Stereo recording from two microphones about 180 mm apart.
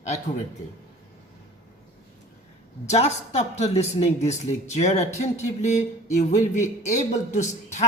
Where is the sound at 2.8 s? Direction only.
40° left (ahead or behind).